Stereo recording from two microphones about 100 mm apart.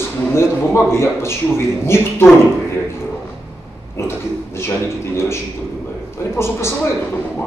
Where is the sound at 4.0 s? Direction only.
25° left (ahead or behind).